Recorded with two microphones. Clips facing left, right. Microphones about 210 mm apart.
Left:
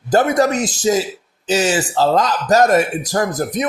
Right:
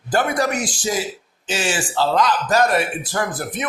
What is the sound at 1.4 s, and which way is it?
Speech, 40° left (ahead or behind).